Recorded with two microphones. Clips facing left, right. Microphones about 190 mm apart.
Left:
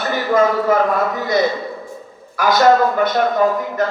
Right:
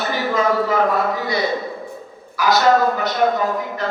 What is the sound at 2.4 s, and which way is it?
Speech, 50° left (ahead or behind).